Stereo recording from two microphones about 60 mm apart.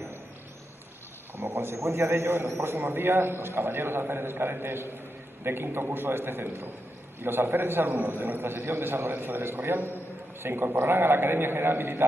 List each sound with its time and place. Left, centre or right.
1.3 s a man's voice: right